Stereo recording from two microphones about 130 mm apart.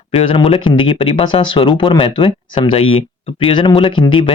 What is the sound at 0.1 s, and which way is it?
Speech, 45° left (ahead or behind).